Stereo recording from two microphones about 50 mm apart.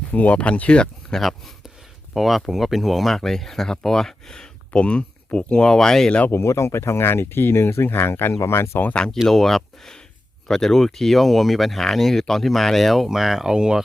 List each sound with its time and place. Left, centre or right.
0.1 s speech: left
1.1 s speech: centre
2.1 s speech: centre
4.7 s speech: left
6.3 s speech: left
8.3 s speech: left
9.2 s speech: centre
13.5 s speech: centre